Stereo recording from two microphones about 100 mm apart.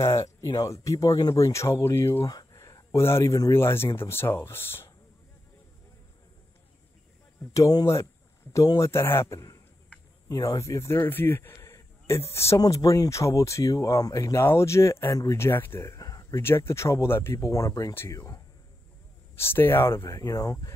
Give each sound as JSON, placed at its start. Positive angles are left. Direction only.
{"t": 0.0, "sound": "speech", "side_deg": 30}
{"t": 2.2, "sound": "speech", "side_deg": 35}
{"t": 7.5, "sound": "speech", "side_deg": 35}
{"t": 11.5, "sound": "a sound", "side_deg": 35}
{"t": 12.5, "sound": "speech", "side_deg": 35}